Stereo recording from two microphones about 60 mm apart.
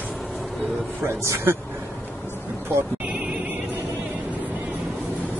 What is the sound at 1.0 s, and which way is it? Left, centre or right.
Speech, right.